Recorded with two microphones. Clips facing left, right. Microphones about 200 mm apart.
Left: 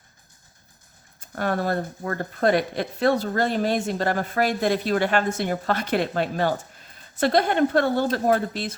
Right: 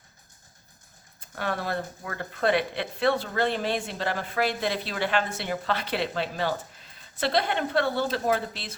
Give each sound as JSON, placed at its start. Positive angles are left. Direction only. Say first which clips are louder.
{"t": 1.2, "sound": "speech", "louder": "left 6 dB", "side_deg": 45}